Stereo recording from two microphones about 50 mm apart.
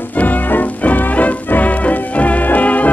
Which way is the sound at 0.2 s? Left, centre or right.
Left.